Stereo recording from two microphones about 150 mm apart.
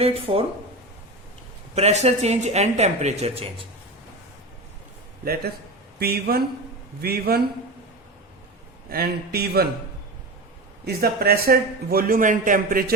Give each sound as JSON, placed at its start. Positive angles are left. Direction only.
{"t": 0.0, "sound": "speech", "side_deg": -40}
{"t": 1.7, "sound": "speech", "side_deg": -45}
{"t": 6.0, "sound": "a man's voice", "side_deg": -90}
{"t": 8.9, "sound": "a man's voice", "side_deg": -90}
{"t": 10.8, "sound": "a man's voice", "side_deg": -90}